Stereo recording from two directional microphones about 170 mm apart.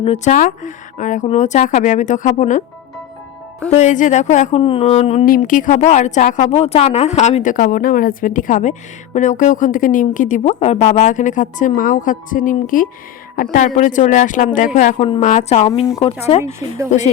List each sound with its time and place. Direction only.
0.0 s mantra: 35° left (ahead or behind)
0.3 s speech: 45° left (ahead or behind)
3.7 s speech: 45° left (ahead or behind)
4.6 s mantra: 35° left (ahead or behind)
5.2 s speech: 55° left (ahead or behind); by 15.9 s 35° left (ahead or behind)
16.4 s speech: 15° right (ahead or behind)